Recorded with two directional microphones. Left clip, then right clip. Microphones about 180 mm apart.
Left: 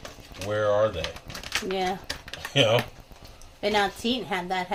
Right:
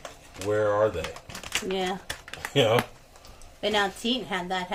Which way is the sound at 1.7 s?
20° left (ahead or behind).